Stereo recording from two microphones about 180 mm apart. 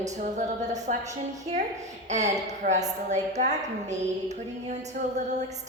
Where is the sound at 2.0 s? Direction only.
40° right (ahead or behind).